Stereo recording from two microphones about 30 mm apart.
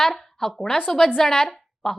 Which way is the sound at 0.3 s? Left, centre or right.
Centre.